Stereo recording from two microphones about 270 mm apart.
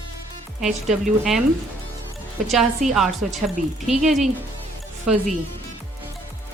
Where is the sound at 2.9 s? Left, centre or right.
Centre.